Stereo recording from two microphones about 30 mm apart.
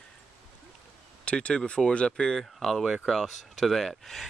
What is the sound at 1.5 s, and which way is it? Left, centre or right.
Speech, left.